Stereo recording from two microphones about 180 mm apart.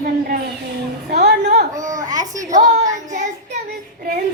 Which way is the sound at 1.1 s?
65° right (ahead or behind).